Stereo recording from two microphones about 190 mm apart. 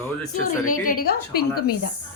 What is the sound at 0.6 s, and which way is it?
A woman's voice, 45° left (ahead or behind).